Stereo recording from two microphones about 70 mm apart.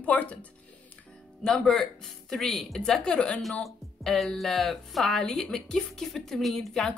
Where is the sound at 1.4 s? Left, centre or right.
Centre.